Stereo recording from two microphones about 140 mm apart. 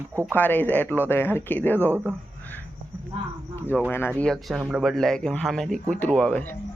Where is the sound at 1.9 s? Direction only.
15° right (ahead or behind).